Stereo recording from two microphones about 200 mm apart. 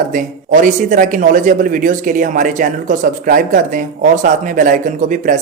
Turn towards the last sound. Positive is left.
turn(degrees=-40)  # may be behind; listen again after turning